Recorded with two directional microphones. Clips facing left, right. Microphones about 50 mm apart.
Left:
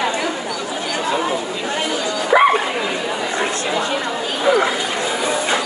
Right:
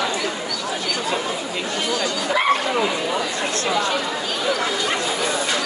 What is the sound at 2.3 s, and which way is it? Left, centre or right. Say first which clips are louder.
Bow-wow: left 10 dB; left.